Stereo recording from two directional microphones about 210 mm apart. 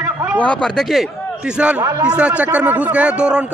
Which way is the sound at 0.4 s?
5° left (ahead or behind).